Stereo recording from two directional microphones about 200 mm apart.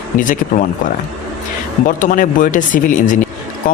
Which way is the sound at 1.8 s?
40° left (ahead or behind).